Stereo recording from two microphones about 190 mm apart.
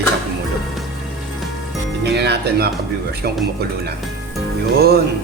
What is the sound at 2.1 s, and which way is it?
Music, 60° right (ahead or behind).